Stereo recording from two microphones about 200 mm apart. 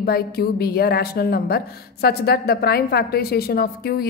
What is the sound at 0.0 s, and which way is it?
A woman's voice, 50° left (ahead or behind).